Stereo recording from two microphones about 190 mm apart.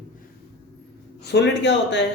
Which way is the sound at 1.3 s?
65° left (ahead or behind).